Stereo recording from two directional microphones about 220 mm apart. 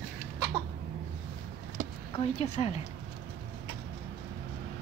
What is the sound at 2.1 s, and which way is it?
Speech, 30° left (ahead or behind).